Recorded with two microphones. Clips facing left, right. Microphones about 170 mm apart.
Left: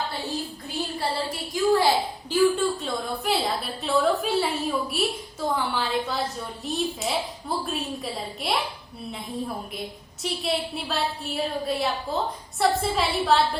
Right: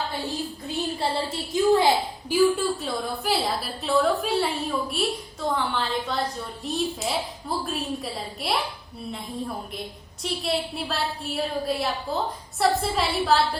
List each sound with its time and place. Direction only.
0.9 s speech: 20° right (ahead or behind)
2.3 s a woman's voice: 5° right (ahead or behind)